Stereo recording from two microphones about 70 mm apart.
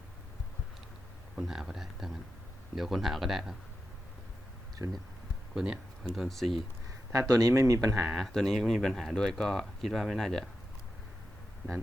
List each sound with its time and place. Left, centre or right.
1.4 s speech: centre
4.8 s speech: right
5.5 s speech: centre
6.1 s speech: centre
7.1 s speech: right
8.1 s speech: centre